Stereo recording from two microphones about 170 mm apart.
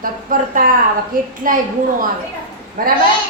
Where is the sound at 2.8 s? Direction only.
55° right (ahead or behind).